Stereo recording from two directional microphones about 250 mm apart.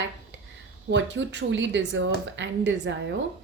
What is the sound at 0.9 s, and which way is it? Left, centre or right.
Speech, right.